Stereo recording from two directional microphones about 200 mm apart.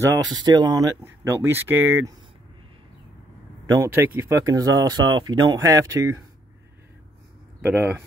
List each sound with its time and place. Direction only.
0.0 s speech: 20° right (ahead or behind)
3.6 s speech: 15° right (ahead or behind)
7.6 s speech: 10° right (ahead or behind)